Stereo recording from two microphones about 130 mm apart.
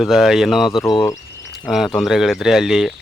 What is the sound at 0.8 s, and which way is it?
Speech, 40° left (ahead or behind).